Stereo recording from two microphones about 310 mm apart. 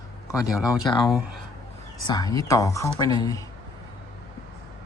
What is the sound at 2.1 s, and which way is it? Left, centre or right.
Speech, centre.